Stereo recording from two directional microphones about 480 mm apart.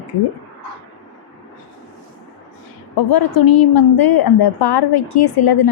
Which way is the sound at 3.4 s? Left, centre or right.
Left.